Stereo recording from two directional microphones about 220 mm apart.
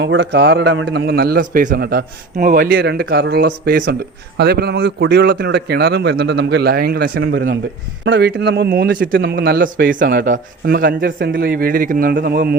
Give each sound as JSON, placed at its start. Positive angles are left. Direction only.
{"t": 0.0, "sound": "a man's voice", "side_deg": -55}